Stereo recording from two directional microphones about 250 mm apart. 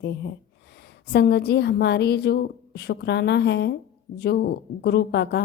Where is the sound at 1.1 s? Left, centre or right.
Left.